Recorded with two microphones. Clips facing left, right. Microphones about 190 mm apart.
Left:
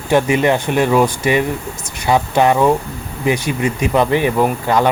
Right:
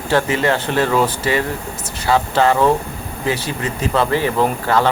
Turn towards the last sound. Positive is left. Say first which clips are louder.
# left 2 dB
turn(degrees=15)  # may be behind; listen again after turning